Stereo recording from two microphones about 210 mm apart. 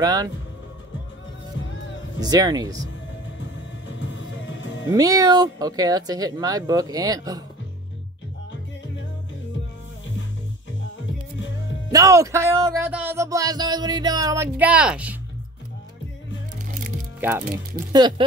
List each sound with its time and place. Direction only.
0.0 s speech: 15° right (ahead or behind)
2.1 s speech: 20° right (ahead or behind)
4.0 s music: 60° left (ahead or behind)
4.9 s speech: 15° right (ahead or behind)
11.9 s speech: 15° right (ahead or behind)
17.9 s speech: 20° right (ahead or behind)